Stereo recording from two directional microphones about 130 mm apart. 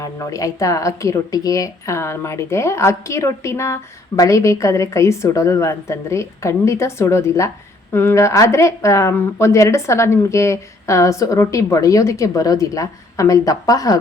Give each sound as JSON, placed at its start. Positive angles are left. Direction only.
{"t": 0.0, "sound": "a woman's voice", "side_deg": 25}